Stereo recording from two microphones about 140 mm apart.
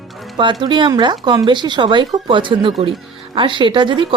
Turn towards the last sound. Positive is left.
turn(degrees=-35)  # may be behind; listen again after turning